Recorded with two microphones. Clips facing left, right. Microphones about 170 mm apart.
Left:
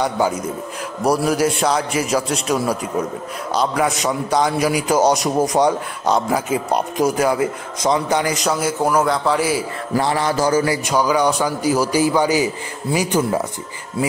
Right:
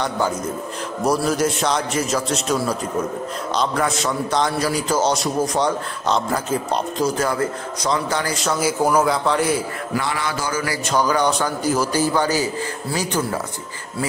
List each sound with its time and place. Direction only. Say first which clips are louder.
1.0 s a man's voice: left 2 dB; 10° left (ahead or behind)
8.5 s a man's voice: right 3 dB; centre (ahead or behind)
9.9 s mantra: left 6 dB; 35° left (ahead or behind)
10.9 s a man's voice: right 2 dB; 10° left (ahead or behind)